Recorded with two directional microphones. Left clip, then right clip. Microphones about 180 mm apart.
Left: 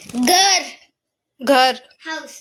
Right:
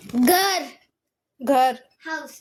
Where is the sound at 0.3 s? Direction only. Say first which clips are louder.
Left 6 dB; 50° right (ahead or behind).